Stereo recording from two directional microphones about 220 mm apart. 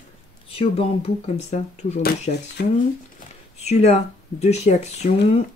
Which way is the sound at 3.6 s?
30° left (ahead or behind).